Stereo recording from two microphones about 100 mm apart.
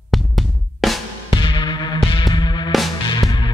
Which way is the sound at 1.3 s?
55° left (ahead or behind).